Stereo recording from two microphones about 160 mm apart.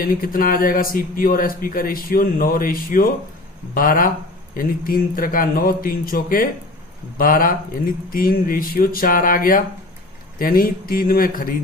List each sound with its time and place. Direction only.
0.0 s speech: 65° left (ahead or behind)